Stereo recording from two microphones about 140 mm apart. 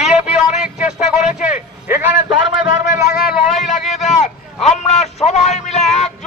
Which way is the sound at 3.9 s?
55° left (ahead or behind).